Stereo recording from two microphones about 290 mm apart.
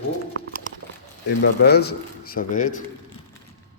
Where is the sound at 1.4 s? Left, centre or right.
Left.